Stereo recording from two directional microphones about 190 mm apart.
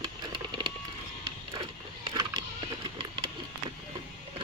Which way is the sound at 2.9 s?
25° right (ahead or behind).